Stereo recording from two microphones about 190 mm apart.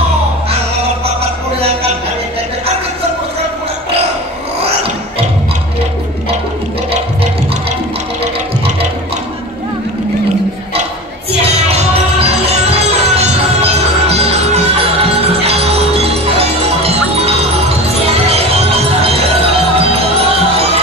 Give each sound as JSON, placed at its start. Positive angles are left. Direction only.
{"t": 12.6, "sound": "music", "side_deg": -30}